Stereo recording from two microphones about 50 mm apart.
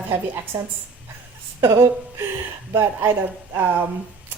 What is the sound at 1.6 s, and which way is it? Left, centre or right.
A woman's voice, right.